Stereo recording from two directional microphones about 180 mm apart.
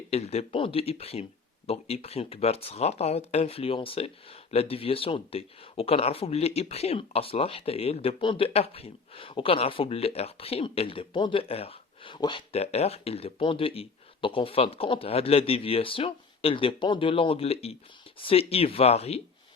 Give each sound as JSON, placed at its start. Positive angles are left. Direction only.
{"t": 0.1, "sound": "speech", "side_deg": 35}